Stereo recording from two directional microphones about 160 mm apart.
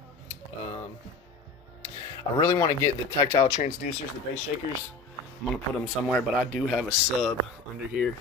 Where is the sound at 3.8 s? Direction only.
55° left (ahead or behind).